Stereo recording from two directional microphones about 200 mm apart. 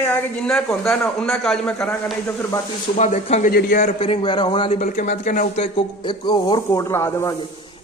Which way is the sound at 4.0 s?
30° left (ahead or behind).